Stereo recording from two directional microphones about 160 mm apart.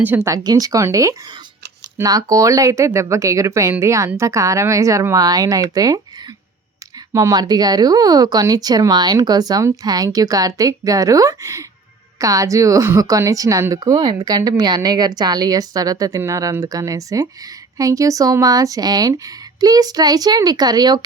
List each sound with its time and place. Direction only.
0.0 s a woman's voice: 10° right (ahead or behind)